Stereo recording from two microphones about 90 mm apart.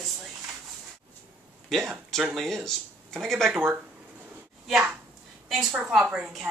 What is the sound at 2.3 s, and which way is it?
A woman's voice, 5° left (ahead or behind).